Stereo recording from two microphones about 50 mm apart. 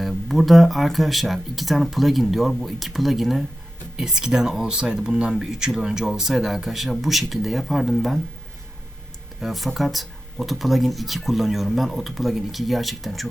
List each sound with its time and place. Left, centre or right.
0.0 s speech: centre
9.4 s speech: centre